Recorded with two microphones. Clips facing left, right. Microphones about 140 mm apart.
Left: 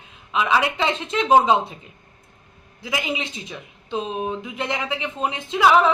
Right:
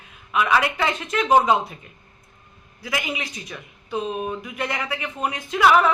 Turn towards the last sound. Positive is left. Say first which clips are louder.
# left 1 dB
turn(degrees=20)  # may be behind; listen again after turning